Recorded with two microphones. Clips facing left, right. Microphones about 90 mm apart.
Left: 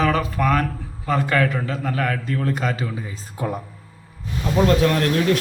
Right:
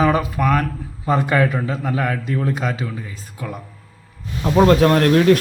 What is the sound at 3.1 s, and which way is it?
Speech, 25° left (ahead or behind).